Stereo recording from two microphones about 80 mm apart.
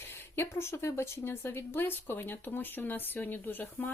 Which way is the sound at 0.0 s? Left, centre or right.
Left.